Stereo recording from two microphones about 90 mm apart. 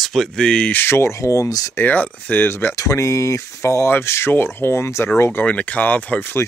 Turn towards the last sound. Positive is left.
turn(degrees=20)  # may be behind; listen again after turning